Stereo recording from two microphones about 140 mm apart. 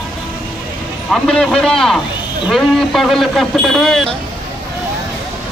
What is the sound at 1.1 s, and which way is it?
Speech, 5° left (ahead or behind).